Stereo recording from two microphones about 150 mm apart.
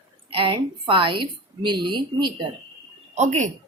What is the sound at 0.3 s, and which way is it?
A woman's voice, 35° right (ahead or behind).